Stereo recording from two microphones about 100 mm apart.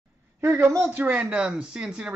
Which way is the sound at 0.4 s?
30° right (ahead or behind).